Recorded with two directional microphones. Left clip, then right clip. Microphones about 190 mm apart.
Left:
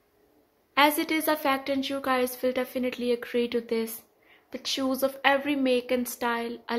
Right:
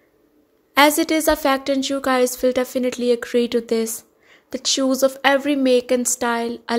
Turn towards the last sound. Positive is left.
turn(degrees=-35)  # may be behind; listen again after turning